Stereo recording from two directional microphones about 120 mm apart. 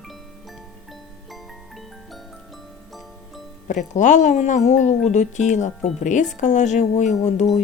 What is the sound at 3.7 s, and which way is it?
Speech, 90° left.